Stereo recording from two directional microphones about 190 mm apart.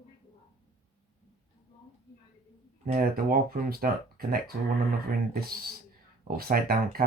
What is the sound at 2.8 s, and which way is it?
Speech, 45° right (ahead or behind).